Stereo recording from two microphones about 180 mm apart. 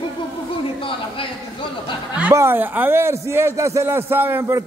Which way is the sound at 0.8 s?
30° left (ahead or behind).